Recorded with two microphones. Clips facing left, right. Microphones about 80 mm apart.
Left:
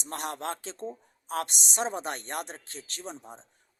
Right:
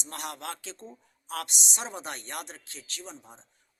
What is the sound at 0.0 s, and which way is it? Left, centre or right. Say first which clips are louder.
A man's voice: left 4 dB; left.